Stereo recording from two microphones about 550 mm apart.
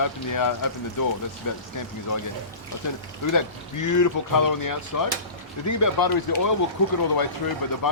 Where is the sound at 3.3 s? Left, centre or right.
Left.